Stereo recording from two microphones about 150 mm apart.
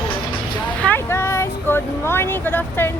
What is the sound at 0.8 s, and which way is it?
Speech, 15° left (ahead or behind).